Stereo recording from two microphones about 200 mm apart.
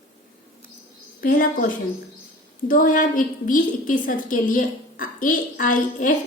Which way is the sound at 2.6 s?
45° left (ahead or behind).